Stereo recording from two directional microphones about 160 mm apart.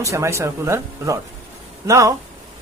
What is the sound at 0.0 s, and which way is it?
Speech, 20° right (ahead or behind).